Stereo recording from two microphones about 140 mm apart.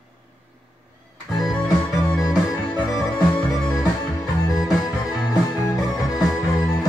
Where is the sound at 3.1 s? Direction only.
5° left (ahead or behind).